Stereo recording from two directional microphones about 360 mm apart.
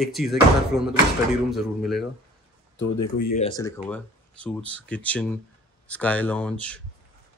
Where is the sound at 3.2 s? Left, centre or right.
Left.